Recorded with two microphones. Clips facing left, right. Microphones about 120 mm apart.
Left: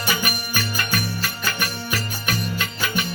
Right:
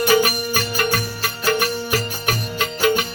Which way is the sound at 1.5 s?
90° right.